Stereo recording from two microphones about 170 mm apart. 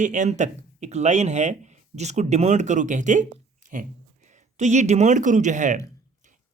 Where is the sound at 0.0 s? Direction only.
45° right (ahead or behind).